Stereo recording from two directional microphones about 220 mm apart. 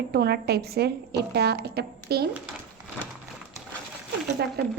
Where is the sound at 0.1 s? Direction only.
45° right (ahead or behind).